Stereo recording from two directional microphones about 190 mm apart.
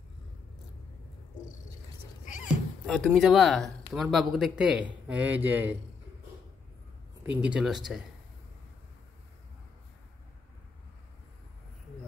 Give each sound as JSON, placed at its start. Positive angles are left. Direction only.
{"t": 2.4, "sound": "speech", "side_deg": -5}
{"t": 7.4, "sound": "speech", "side_deg": -5}